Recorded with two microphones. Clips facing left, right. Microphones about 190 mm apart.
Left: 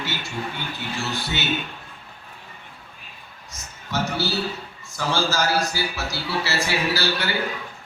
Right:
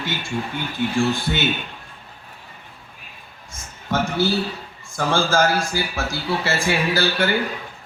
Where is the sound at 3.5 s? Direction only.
50° right (ahead or behind).